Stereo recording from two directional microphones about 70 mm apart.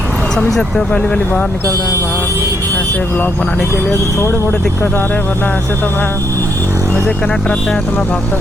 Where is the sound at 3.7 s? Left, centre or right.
Left.